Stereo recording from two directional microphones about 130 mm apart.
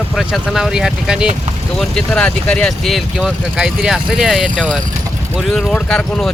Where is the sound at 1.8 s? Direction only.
5° left (ahead or behind).